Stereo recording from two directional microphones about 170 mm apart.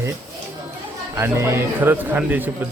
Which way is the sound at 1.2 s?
15° right (ahead or behind).